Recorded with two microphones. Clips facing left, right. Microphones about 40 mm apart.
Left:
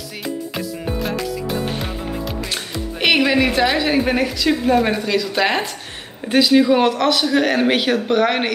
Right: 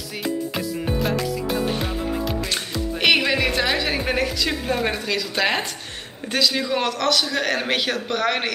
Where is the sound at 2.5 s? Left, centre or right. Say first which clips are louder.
Even; centre.